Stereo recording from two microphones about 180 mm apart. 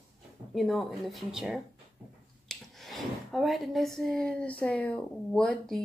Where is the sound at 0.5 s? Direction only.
Centre (ahead or behind).